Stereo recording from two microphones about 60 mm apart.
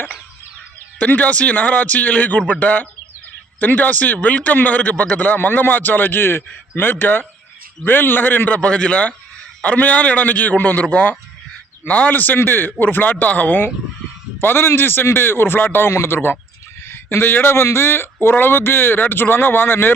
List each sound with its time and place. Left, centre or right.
0.9 s speech: left
14.4 s speech: left